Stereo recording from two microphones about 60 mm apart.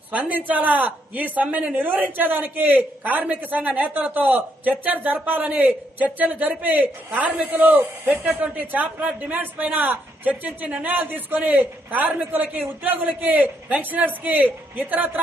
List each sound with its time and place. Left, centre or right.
0.1 s a man's voice: right